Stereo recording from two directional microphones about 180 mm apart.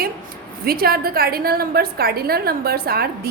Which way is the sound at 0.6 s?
55° right (ahead or behind).